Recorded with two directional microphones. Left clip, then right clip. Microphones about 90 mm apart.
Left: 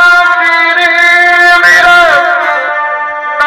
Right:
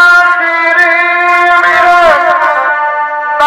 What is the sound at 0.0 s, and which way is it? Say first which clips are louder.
Music: even; 40° right (ahead or behind).